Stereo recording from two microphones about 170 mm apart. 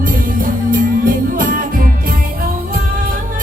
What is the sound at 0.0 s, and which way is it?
Music, 55° right (ahead or behind).